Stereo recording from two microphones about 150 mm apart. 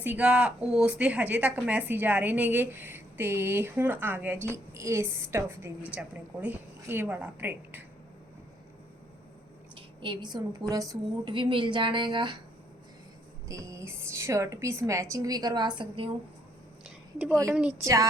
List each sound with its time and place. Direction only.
0.0 s a woman's voice: 10° right (ahead or behind)
9.7 s a woman's voice: 35° right (ahead or behind)
11.3 s a woman's voice: 35° right (ahead or behind)
13.5 s a woman's voice: 20° right (ahead or behind)
17.5 s a woman's voice: 10° right (ahead or behind)
17.8 s a woman's voice: 20° right (ahead or behind)